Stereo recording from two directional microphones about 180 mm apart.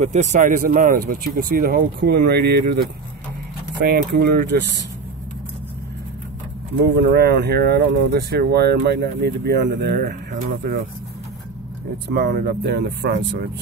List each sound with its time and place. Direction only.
0.0 s speech: 40° right (ahead or behind); by 2.7 s 65° right (ahead or behind)
3.8 s speech: 60° right (ahead or behind)
7.1 s speech: 60° right (ahead or behind)
12.1 s speech: 65° right (ahead or behind)